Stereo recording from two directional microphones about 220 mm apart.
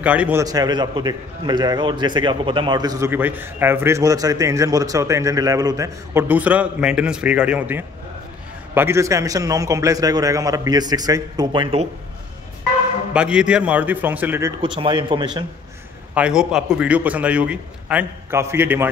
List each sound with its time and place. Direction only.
0.0 s a man's voice: 5° right (ahead or behind); by 11.9 s 25° right (ahead or behind)
13.1 s a man's voice: 5° right (ahead or behind)
14.8 s speech: 20° right (ahead or behind)
16.2 s a man's voice: 5° right (ahead or behind)